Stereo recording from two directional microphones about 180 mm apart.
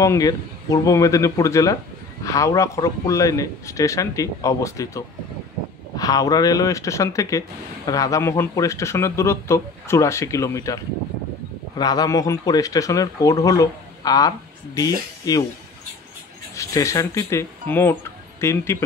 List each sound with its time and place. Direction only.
0.0 s speech: 20° left (ahead or behind)
16.5 s speech: 15° left (ahead or behind)